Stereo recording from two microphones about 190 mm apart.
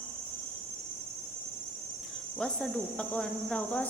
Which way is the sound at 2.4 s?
5° left (ahead or behind).